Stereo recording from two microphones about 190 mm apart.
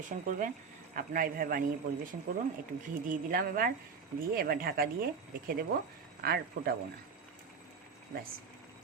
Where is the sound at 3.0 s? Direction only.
50° right (ahead or behind).